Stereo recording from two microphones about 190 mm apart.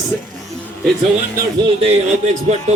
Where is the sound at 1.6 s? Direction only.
30° right (ahead or behind).